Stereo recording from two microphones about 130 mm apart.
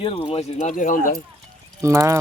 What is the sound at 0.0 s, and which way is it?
Speech, 45° left (ahead or behind).